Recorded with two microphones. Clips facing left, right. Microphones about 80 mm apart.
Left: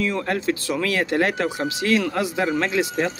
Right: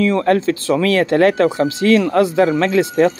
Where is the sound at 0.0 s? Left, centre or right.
Right.